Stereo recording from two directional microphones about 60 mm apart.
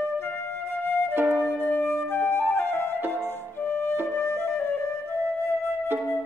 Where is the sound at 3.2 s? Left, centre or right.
Left.